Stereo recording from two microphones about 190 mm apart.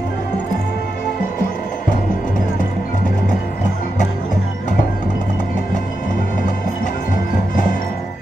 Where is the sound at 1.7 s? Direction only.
45° left (ahead or behind).